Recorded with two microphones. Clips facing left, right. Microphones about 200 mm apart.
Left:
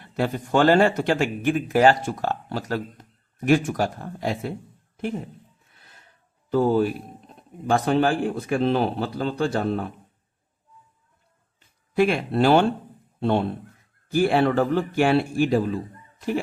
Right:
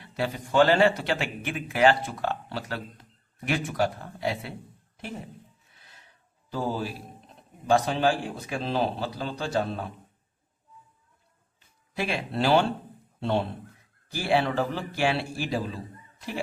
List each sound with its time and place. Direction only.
0.0 s speech: 50° left (ahead or behind)
5.8 s a sound: 55° left (ahead or behind)
6.5 s a man's voice: 55° left (ahead or behind)
11.9 s speech: 55° left (ahead or behind)